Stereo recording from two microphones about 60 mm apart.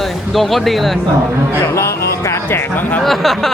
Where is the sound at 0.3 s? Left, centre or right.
Centre.